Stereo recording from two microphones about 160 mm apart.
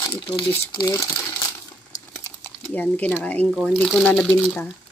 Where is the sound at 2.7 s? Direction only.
10° left (ahead or behind).